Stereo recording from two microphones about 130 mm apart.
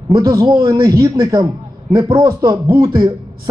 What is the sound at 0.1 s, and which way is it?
A man's voice, 25° right (ahead or behind).